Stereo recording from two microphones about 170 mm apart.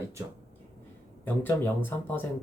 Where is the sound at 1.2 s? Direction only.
10° left (ahead or behind).